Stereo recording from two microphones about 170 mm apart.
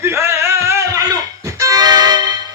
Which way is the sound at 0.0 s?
15° right (ahead or behind).